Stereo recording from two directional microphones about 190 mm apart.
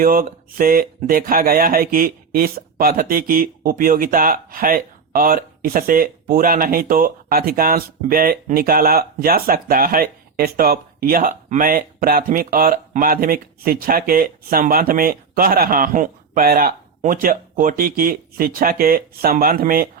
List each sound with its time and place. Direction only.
0.0 s speech: 50° right (ahead or behind)